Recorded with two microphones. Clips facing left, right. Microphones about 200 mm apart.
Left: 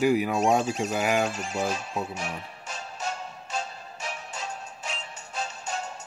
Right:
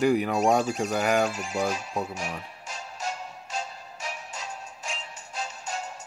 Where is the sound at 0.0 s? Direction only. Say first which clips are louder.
Even; 5° left (ahead or behind).